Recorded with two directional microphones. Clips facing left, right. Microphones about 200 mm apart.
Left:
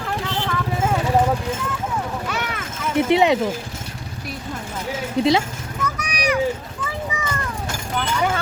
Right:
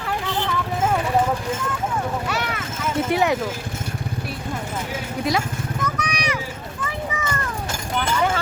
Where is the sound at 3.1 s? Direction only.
20° left (ahead or behind).